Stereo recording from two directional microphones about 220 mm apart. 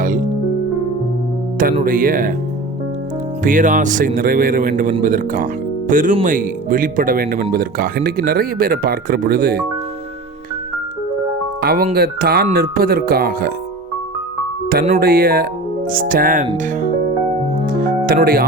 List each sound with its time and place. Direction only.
1.8 s speech: 40° right (ahead or behind)
3.4 s speech: 35° right (ahead or behind)
11.6 s speech: 40° right (ahead or behind)
14.8 s speech: 40° right (ahead or behind)
17.7 s music: 40° right (ahead or behind)